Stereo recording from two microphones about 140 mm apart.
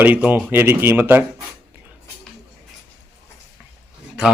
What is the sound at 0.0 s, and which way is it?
Speech, 10° right (ahead or behind).